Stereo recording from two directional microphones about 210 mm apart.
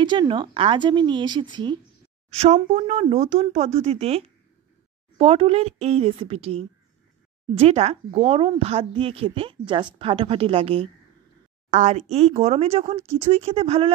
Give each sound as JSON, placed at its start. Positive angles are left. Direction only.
{"t": 0.0, "sound": "speech", "side_deg": -20}